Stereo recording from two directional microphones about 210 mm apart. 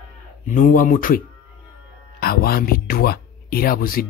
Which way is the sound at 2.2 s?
45° left (ahead or behind).